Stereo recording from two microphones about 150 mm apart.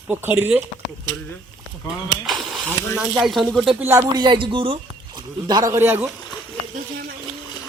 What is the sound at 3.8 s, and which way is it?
Speech, 20° right (ahead or behind).